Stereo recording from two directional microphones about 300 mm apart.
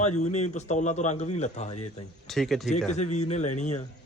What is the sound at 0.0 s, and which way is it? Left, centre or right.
A man's voice, left.